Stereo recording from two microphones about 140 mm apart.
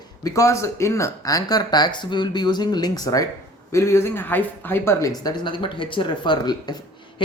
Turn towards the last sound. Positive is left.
turn(degrees=30)  # may be behind; listen again after turning